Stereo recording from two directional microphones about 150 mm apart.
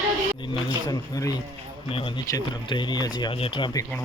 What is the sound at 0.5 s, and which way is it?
Speech, 30° left (ahead or behind).